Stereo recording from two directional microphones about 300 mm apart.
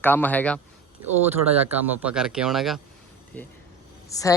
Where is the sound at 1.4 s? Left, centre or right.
Right.